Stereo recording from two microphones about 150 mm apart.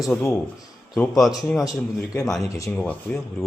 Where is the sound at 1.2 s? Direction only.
Centre (ahead or behind).